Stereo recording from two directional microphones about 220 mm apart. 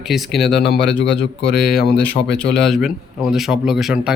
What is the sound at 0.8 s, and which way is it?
Speech, 50° left (ahead or behind).